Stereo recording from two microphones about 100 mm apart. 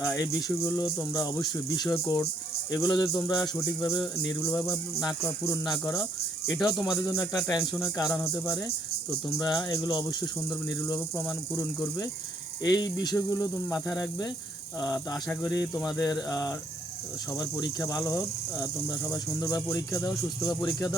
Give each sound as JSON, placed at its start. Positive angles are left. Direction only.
{"t": 0.0, "sound": "speech", "side_deg": 0}
{"t": 0.4, "sound": "speech", "side_deg": 35}
{"t": 1.9, "sound": "speech", "side_deg": 30}
{"t": 6.7, "sound": "speech", "side_deg": 0}
{"t": 7.1, "sound": "speech", "side_deg": 35}
{"t": 9.4, "sound": "speech", "side_deg": 45}
{"t": 12.6, "sound": "speech", "side_deg": 40}
{"t": 19.6, "sound": "speech", "side_deg": 25}